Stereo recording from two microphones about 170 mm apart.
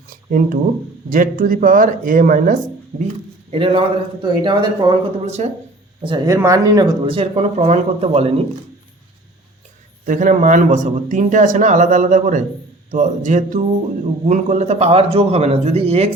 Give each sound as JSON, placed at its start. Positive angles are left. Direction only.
{"t": 0.1, "sound": "a sound", "side_deg": -55}
{"t": 1.1, "sound": "speech", "side_deg": -55}
{"t": 3.5, "sound": "speech", "side_deg": -30}
{"t": 5.2, "sound": "speech", "side_deg": -40}
{"t": 6.0, "sound": "speech", "side_deg": -30}
{"t": 10.1, "sound": "speech", "side_deg": -50}